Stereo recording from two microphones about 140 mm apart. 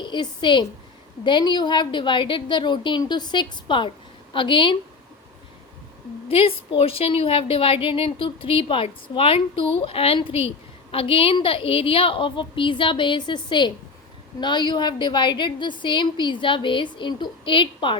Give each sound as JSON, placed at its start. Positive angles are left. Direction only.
{"t": 0.0, "sound": "a woman's voice", "side_deg": 35}
{"t": 6.2, "sound": "a woman's voice", "side_deg": 40}